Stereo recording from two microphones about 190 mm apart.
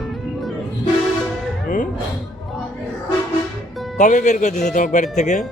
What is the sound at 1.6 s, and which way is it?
Music, 45° left (ahead or behind).